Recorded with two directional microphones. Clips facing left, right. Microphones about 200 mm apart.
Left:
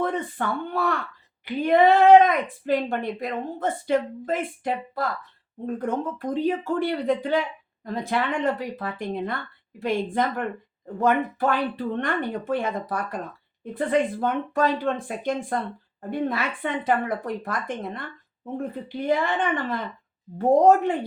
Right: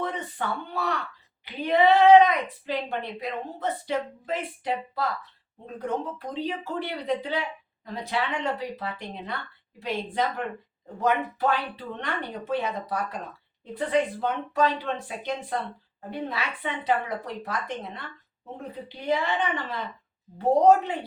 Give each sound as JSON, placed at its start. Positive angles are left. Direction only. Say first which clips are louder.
{"t": 0.0, "sound": "speech", "louder": "left 5 dB", "side_deg": 50}